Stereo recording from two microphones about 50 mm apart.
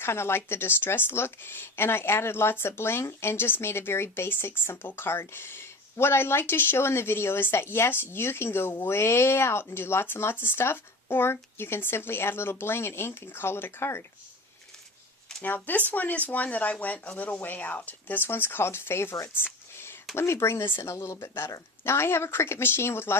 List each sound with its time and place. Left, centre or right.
0.0 s speech: left
15.4 s speech: left
20.1 s speech: left
20.8 s speech: left
21.2 s speech: left